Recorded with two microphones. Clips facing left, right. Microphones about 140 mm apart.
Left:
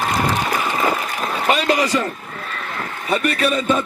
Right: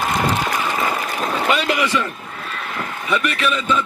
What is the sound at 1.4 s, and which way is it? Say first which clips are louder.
A man's voice: left 3 dB; 35° left (ahead or behind).